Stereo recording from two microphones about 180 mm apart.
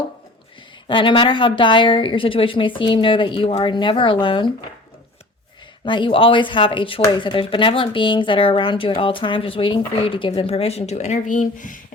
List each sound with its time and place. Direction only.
0.9 s speech: 25° left (ahead or behind)
5.8 s speech: 25° left (ahead or behind); by 11.8 s 45° left (ahead or behind)